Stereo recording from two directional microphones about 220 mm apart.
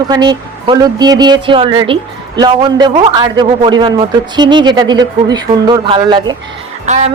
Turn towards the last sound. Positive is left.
turn(degrees=-30)  # may be behind; listen again after turning